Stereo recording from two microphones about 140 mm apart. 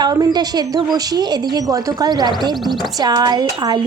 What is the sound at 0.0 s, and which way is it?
A woman's voice, 30° right (ahead or behind).